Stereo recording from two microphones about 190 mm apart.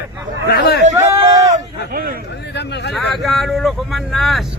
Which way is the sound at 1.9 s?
50° right (ahead or behind).